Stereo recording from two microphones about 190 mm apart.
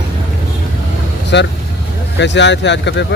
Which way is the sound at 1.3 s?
70° left (ahead or behind).